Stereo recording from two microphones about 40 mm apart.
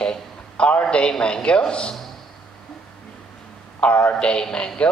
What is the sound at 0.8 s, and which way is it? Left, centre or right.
A man's voice, left.